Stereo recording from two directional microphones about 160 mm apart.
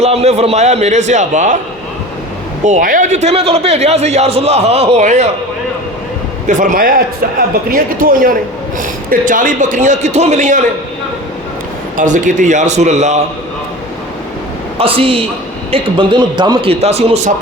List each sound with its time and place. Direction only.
0.0 s a man's voice: 40° right (ahead or behind)
2.6 s a man's voice: 55° right (ahead or behind)
6.5 s a man's voice: 55° right (ahead or behind)
11.9 s a man's voice: 50° right (ahead or behind)
14.8 s a man's voice: 35° right (ahead or behind)